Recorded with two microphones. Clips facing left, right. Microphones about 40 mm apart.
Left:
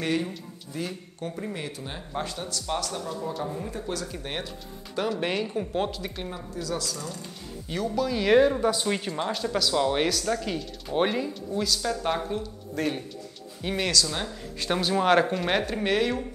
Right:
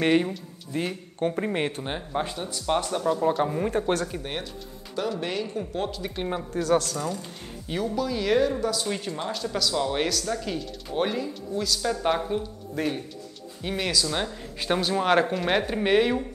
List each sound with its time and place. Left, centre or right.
0.0 s speech: right
2.0 s a man's voice: right
4.2 s speech: centre
5.2 s speech: centre
6.3 s a man's voice: right
7.1 s speech: centre
7.9 s speech: centre
8.3 s speech: left; by 13.9 s centre
13.9 s speech: centre
14.8 s speech: centre
15.6 s speech: centre